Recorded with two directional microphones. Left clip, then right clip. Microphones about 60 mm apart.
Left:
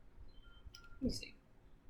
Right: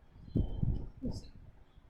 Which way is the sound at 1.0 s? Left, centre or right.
Centre.